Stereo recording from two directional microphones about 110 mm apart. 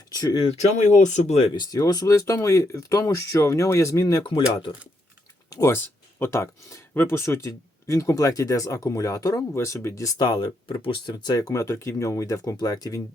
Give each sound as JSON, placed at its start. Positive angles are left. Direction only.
{"t": 0.1, "sound": "speech", "side_deg": 35}
{"t": 0.4, "sound": "speech", "side_deg": 90}
{"t": 1.5, "sound": "speech", "side_deg": 40}
{"t": 4.4, "sound": "speech", "side_deg": 45}
{"t": 5.5, "sound": "speech", "side_deg": 30}